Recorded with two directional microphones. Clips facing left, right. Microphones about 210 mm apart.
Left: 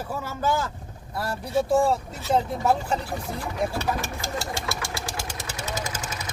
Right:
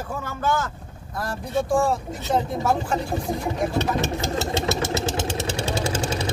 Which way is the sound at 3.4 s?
25° right (ahead or behind).